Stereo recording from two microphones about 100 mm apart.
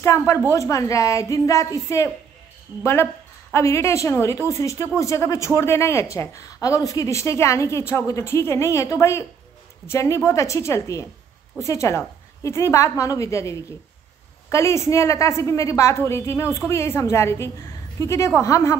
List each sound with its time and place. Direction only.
0.5 s a woman's voice: 35° left (ahead or behind)